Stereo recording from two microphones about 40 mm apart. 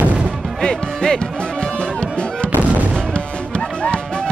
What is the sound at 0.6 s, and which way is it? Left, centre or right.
Music, centre.